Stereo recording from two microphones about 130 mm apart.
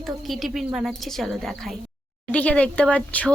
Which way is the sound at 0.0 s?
Centre (ahead or behind).